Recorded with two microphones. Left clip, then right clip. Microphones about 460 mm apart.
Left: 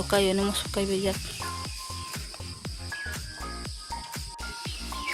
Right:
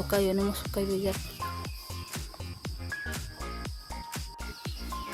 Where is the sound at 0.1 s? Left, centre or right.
Right.